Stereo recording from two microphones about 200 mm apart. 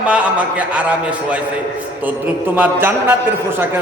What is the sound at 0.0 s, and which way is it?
A man's voice, 5° right (ahead or behind).